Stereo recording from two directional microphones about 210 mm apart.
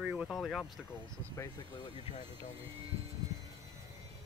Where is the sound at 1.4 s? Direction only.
20° left (ahead or behind).